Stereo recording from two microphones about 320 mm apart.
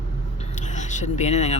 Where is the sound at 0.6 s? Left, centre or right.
Left.